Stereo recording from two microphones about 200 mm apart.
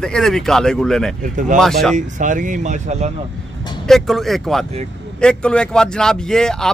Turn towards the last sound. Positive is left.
turn(degrees=5)  # may be behind; listen again after turning